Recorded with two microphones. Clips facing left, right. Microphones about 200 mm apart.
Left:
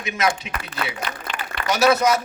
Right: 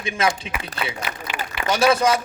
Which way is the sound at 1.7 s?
30° right (ahead or behind).